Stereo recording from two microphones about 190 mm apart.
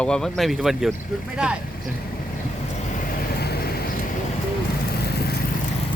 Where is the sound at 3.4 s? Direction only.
55° left (ahead or behind).